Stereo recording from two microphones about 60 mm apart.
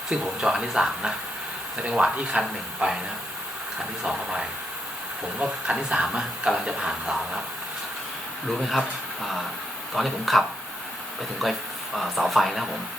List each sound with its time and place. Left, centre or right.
0.1 s speech: centre
4.0 s speech: centre
9.9 s speech: centre